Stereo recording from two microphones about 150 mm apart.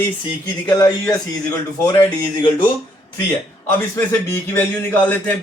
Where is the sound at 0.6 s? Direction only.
25° left (ahead or behind).